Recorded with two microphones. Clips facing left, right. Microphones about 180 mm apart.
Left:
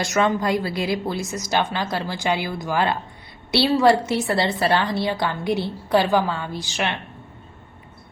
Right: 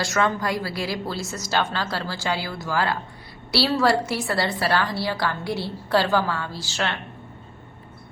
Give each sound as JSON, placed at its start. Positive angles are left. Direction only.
{"t": 0.0, "sound": "a woman's voice", "side_deg": 20}